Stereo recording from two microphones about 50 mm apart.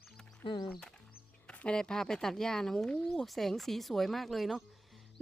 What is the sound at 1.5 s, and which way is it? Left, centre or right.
Music, left.